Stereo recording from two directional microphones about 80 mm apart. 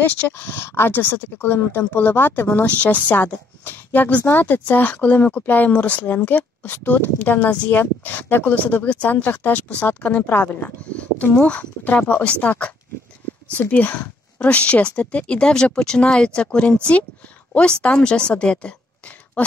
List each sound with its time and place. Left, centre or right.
0.0 s a woman's voice: left